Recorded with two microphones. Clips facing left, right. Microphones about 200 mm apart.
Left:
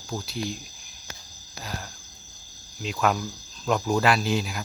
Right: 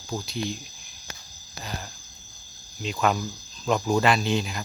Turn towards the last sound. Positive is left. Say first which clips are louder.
# even
turn(degrees=5)  # may be behind; listen again after turning